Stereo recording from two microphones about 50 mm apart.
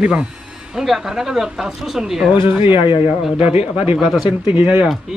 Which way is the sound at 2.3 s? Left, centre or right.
Right.